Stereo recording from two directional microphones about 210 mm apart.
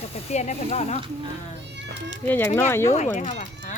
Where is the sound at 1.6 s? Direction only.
55° right (ahead or behind).